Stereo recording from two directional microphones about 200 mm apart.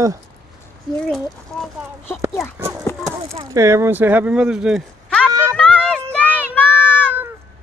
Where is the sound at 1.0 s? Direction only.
5° left (ahead or behind).